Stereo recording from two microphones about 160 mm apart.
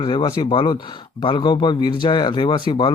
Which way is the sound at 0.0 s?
30° left (ahead or behind).